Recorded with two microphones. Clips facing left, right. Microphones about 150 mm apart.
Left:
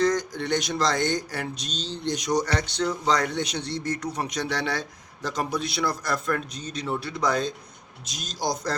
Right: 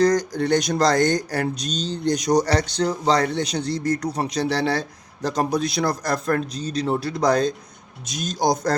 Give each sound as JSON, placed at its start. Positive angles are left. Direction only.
{"t": 0.0, "sound": "speech", "side_deg": -40}